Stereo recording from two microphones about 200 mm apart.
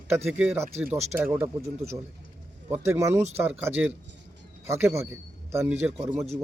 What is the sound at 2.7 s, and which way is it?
A man's voice, 15° right (ahead or behind).